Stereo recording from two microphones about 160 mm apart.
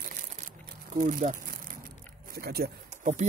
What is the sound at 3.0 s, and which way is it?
Speech, 45° right (ahead or behind).